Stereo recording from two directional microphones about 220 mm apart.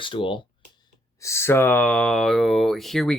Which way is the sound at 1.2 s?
10° left (ahead or behind).